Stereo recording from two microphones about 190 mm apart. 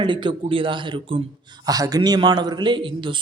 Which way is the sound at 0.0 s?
25° right (ahead or behind).